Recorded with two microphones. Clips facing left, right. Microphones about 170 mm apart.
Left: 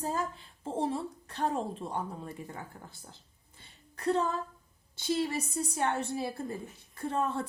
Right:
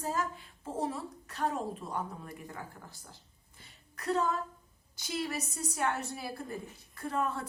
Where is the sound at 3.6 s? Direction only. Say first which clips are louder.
Left 8 dB; 30° left (ahead or behind).